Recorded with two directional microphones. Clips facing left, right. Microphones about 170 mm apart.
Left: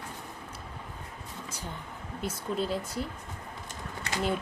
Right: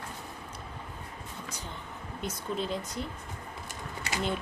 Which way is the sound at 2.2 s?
5° left (ahead or behind).